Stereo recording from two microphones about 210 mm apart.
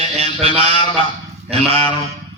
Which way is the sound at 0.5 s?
30° right (ahead or behind).